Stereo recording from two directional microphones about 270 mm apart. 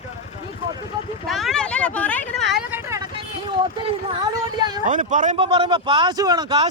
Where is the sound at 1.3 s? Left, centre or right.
Centre.